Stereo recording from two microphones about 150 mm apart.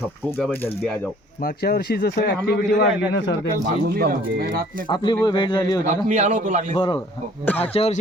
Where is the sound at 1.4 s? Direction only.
90° left.